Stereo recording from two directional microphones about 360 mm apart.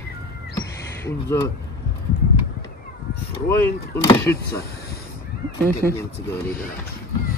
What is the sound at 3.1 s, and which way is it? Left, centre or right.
Cat, left.